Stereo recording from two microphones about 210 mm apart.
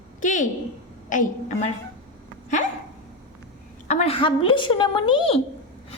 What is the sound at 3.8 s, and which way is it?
A woman's voice, 30° left (ahead or behind).